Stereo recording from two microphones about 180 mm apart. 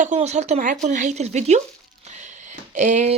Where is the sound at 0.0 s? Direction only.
40° right (ahead or behind).